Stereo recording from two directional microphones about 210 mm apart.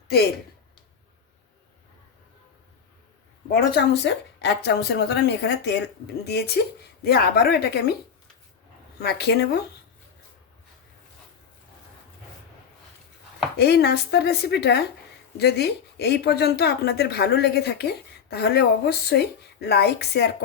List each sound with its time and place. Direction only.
3.5 s speech: 55° left (ahead or behind)
9.0 s speech: 50° left (ahead or behind)
13.6 s speech: 50° left (ahead or behind)